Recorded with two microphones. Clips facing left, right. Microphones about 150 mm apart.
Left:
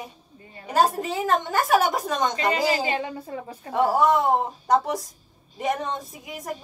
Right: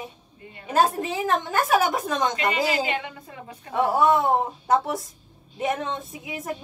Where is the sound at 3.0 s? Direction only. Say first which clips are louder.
Left 6 dB; 35° left (ahead or behind).